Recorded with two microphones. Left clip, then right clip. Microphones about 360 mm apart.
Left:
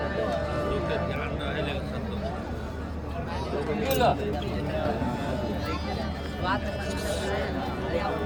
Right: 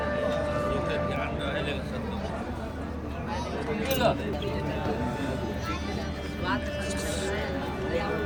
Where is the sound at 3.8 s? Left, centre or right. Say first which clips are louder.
Left 2 dB; centre.